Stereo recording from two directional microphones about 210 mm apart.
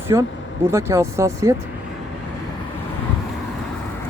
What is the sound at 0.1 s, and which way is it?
Speech, 15° right (ahead or behind).